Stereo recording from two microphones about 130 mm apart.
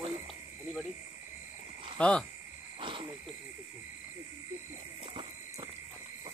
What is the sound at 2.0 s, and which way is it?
Speech, 10° left (ahead or behind).